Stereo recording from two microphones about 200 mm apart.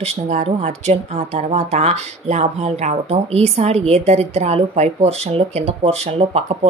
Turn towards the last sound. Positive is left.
turn(degrees=-30)  # may be behind; listen again after turning